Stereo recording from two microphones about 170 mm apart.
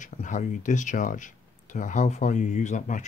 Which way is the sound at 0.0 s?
45° left (ahead or behind).